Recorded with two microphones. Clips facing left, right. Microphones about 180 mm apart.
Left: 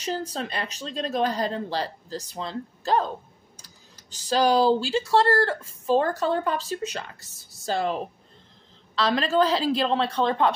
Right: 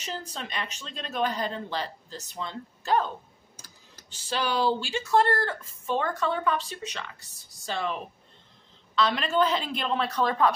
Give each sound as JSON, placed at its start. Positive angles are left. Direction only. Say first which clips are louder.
{"t": 0.0, "sound": "speech", "louder": "left 7 dB", "side_deg": 35}
{"t": 4.1, "sound": "speech", "louder": "left 8 dB", "side_deg": 40}